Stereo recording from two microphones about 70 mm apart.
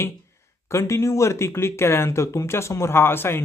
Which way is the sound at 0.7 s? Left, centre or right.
Left.